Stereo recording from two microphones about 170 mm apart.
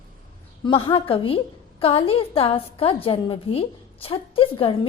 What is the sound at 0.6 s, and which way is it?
A woman's voice, 30° left (ahead or behind).